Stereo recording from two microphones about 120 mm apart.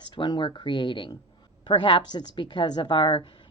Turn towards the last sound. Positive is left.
turn(degrees=45)  # may be behind; listen again after turning